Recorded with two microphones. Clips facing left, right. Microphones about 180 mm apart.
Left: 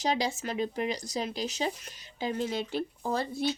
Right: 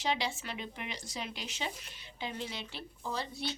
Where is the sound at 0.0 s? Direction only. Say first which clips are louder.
Left 5 dB; 40° left (ahead or behind).